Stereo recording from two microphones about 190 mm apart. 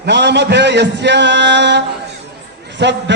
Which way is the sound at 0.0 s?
65° right (ahead or behind).